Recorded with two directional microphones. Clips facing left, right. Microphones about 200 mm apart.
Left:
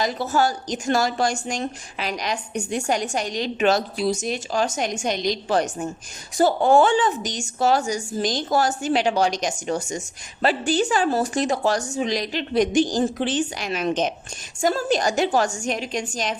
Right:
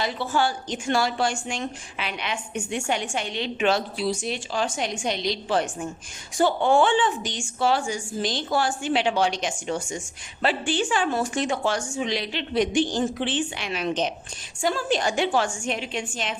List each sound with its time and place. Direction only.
0.0 s a woman's voice: 40° left (ahead or behind)